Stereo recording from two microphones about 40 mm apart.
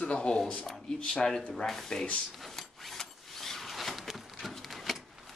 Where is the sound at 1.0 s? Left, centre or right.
Centre.